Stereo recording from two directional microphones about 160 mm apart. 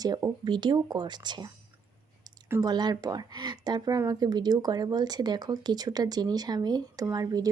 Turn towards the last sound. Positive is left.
turn(degrees=-25)  # may be behind; listen again after turning